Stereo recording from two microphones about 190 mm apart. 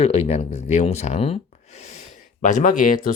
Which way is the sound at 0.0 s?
35° left (ahead or behind).